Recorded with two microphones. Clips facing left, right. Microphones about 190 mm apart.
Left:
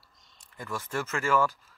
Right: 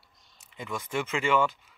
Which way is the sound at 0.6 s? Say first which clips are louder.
Right 1 dB; 15° right (ahead or behind).